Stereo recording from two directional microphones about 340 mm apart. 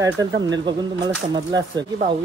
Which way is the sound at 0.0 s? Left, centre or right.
Centre.